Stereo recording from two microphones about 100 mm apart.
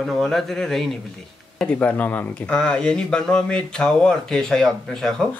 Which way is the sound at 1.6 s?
15° left (ahead or behind).